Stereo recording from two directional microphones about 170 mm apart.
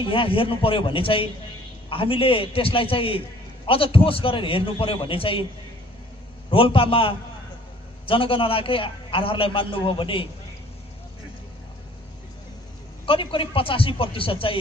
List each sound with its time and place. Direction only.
0.0 s a man's voice: 30° left (ahead or behind)
6.5 s a man's voice: 30° left (ahead or behind)
13.0 s a man's voice: 30° left (ahead or behind)